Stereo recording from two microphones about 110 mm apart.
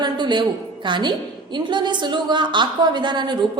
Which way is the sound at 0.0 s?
40° right (ahead or behind).